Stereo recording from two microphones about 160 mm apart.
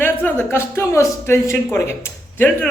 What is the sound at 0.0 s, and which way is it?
Speech, 10° left (ahead or behind).